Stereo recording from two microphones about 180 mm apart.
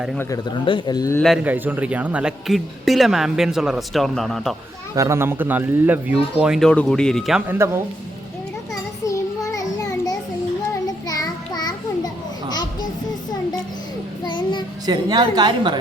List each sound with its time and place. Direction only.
0.2 s speech: 20° left (ahead or behind)
1.5 s speech: 10° right (ahead or behind)
4.9 s speech: 15° right (ahead or behind)
8.7 s a sound: 20° left (ahead or behind)
14.3 s child singing: 25° left (ahead or behind)
14.8 s a woman's voice: 25° right (ahead or behind)